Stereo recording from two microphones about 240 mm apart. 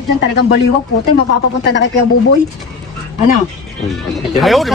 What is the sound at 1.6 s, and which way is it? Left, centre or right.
Speech, left.